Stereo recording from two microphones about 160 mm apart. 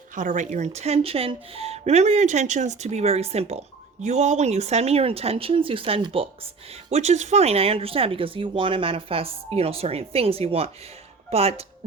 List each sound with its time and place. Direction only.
0.2 s speech: 50° right (ahead or behind)